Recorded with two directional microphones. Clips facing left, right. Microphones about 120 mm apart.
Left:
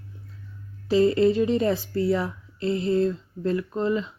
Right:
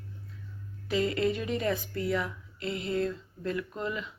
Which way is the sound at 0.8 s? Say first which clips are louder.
Left 9 dB; 35° left (ahead or behind).